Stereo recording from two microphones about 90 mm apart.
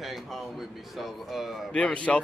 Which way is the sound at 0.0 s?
Centre (ahead or behind).